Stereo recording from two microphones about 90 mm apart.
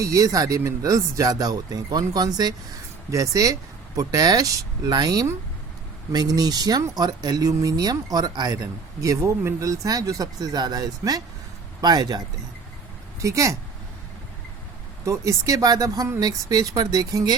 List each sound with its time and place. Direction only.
0.0 s speech: 40° right (ahead or behind)
13.1 s speech: 35° right (ahead or behind)
15.0 s speech: 35° right (ahead or behind)